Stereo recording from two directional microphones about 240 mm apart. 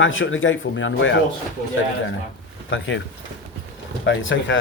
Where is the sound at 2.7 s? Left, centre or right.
Left.